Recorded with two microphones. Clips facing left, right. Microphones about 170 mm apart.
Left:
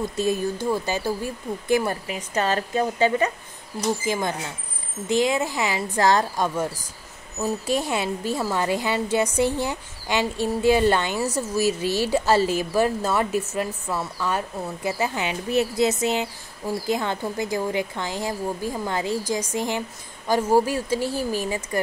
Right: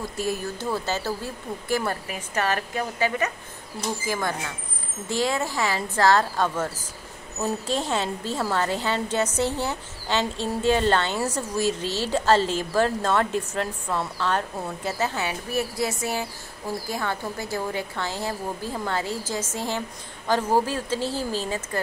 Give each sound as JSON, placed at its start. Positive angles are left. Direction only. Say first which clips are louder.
{"t": 0.1, "sound": "speech", "louder": "left 5 dB", "side_deg": 20}
{"t": 4.0, "sound": "a woman's voice", "louder": "left 2 dB", "side_deg": 20}